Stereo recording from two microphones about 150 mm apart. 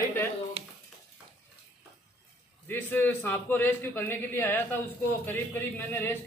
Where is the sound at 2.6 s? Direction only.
15° left (ahead or behind).